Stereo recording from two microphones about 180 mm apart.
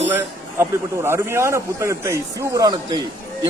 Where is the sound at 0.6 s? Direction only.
15° right (ahead or behind).